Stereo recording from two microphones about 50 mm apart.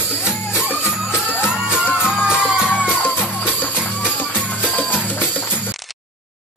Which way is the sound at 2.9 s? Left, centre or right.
Left.